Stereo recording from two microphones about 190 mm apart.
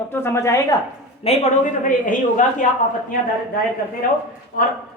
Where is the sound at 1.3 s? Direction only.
30° left (ahead or behind).